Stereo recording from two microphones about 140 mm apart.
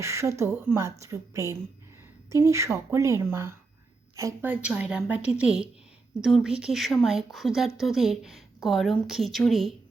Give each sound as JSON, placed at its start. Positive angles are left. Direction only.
{"t": 0.0, "sound": "a woman's voice", "side_deg": -20}